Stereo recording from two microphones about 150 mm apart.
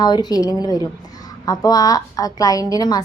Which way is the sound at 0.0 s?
25° left (ahead or behind).